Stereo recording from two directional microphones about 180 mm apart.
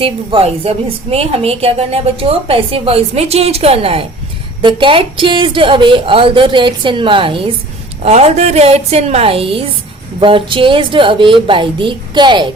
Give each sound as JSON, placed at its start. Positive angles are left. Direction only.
{"t": 0.0, "sound": "a woman's voice", "side_deg": -30}